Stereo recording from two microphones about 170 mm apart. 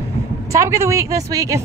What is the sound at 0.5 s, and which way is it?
Speech, 15° right (ahead or behind).